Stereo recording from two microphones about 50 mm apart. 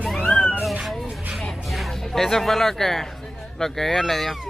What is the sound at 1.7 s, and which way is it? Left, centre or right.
Speech, centre.